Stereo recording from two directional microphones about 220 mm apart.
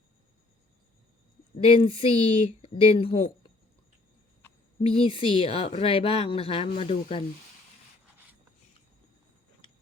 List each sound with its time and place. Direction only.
1.5 s a woman's voice: 25° left (ahead or behind)
4.8 s a woman's voice: 25° left (ahead or behind)